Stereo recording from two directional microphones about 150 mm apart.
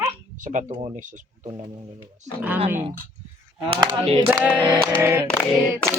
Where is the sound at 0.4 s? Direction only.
55° right (ahead or behind).